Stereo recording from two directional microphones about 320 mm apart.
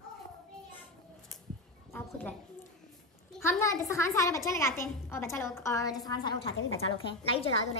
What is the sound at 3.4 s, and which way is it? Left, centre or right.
A child's voice, centre.